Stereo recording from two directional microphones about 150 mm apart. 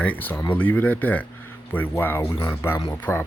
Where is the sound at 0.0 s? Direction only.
10° left (ahead or behind).